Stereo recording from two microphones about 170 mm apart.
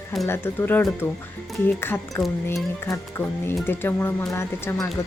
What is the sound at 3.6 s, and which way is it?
Speech, 10° left (ahead or behind).